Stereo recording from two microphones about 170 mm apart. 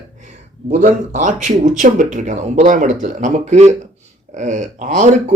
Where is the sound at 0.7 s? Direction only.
50° right (ahead or behind).